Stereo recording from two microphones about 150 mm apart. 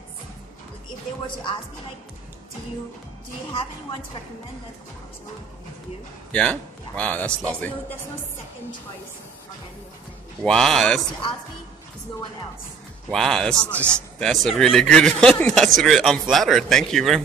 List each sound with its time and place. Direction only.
1.2 s speech: 35° left (ahead or behind)
6.3 s a man's voice: 10° left (ahead or behind)
10.4 s a man's voice: 5° left (ahead or behind)
13.1 s a man's voice: 5° left (ahead or behind)